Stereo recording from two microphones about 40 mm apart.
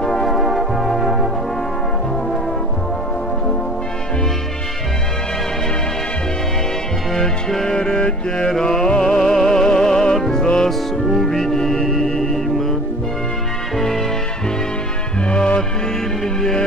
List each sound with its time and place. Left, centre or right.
0.0 s music: centre
0.3 s music: centre
7.2 s music: centre
13.7 s music: centre
15.2 s music: left
16.3 s music: centre